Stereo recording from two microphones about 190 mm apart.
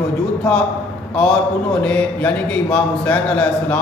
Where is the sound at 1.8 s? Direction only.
5° left (ahead or behind).